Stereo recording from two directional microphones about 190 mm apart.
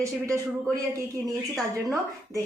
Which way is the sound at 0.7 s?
20° right (ahead or behind).